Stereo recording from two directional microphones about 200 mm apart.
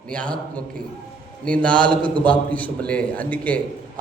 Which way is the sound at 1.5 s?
5° left (ahead or behind).